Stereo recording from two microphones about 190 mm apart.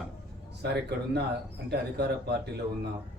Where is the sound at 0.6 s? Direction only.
60° right (ahead or behind).